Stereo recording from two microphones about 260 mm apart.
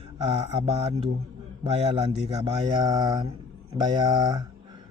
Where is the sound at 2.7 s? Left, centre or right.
Centre.